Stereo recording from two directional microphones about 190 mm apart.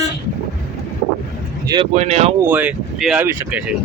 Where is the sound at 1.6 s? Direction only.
20° right (ahead or behind).